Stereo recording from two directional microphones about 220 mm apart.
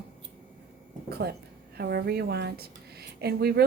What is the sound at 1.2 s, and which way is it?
Speech, 45° right (ahead or behind).